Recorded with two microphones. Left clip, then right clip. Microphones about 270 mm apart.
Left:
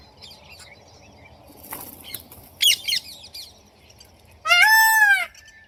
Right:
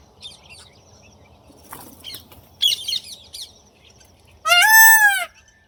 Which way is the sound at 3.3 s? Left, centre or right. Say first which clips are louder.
Right 4 dB; right.